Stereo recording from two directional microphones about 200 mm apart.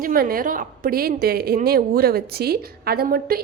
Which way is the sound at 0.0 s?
45° right (ahead or behind).